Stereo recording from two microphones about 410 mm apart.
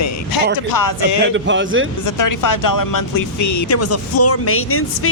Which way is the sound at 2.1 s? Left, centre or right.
Left.